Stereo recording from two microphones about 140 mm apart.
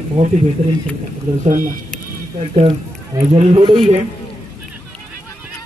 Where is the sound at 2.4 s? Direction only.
45° right (ahead or behind).